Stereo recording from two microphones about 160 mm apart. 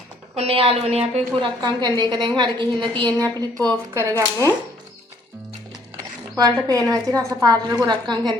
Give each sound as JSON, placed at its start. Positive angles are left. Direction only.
{"t": 0.3, "sound": "a woman's voice", "side_deg": -35}
{"t": 1.6, "sound": "a woman's voice", "side_deg": -25}
{"t": 6.3, "sound": "a woman's voice", "side_deg": -25}